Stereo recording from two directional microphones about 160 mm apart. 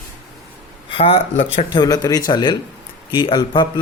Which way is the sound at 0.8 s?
35° left (ahead or behind).